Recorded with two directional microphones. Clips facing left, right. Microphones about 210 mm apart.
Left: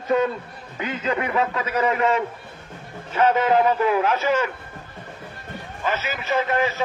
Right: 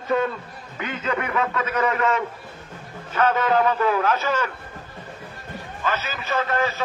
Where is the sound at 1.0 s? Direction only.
30° left (ahead or behind).